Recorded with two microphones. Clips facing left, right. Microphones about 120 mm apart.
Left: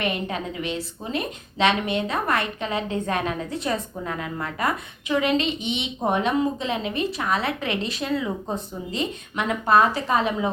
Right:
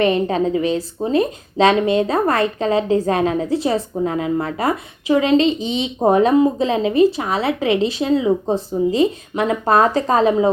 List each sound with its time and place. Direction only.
0.0 s a woman's voice: 35° right (ahead or behind)